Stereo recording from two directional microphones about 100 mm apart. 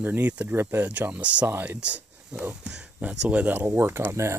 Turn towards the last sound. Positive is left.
turn(degrees=-25)  # may be behind; listen again after turning